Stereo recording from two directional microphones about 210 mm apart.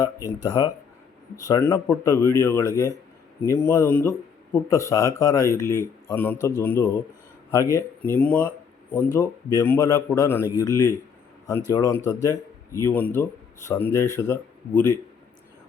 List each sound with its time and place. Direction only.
0.0 s speech: 15° left (ahead or behind)